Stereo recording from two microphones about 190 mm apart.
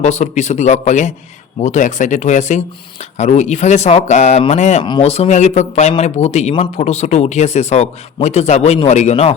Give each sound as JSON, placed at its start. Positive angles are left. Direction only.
{"t": 0.0, "sound": "a man's voice", "side_deg": 35}
{"t": 4.8, "sound": "a man's voice", "side_deg": 25}